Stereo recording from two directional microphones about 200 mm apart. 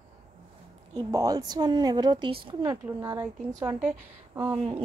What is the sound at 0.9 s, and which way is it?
Speech, 20° right (ahead or behind).